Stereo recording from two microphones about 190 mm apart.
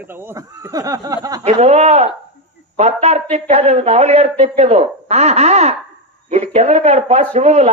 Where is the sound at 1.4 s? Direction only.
35° right (ahead or behind).